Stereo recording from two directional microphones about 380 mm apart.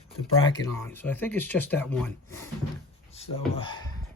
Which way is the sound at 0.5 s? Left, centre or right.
Centre.